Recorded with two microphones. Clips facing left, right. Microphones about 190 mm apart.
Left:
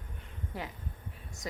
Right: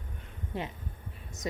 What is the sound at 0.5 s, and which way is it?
A woman's voice, 25° right (ahead or behind).